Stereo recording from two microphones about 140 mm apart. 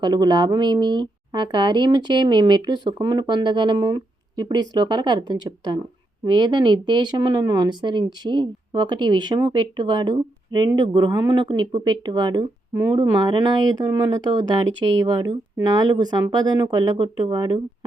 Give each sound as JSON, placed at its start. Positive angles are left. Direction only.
{"t": 0.0, "sound": "speech", "side_deg": -30}